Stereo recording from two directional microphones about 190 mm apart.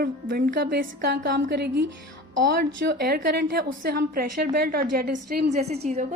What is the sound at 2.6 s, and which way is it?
A woman's voice, 50° right (ahead or behind).